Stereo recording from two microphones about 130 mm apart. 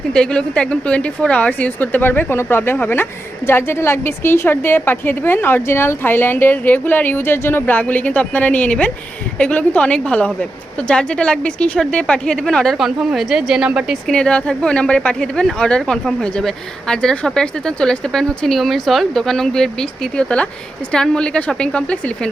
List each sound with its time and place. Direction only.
0.1 s a woman's voice: 5° left (ahead or behind)